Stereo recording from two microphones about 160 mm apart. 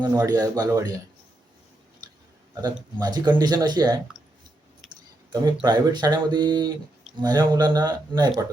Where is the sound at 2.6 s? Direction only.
25° right (ahead or behind).